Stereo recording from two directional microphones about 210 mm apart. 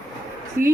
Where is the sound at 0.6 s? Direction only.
45° right (ahead or behind).